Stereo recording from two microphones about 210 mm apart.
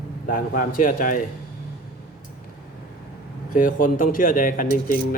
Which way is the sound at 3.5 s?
40° left (ahead or behind).